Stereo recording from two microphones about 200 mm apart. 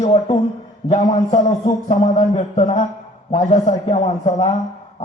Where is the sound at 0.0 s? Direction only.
25° left (ahead or behind).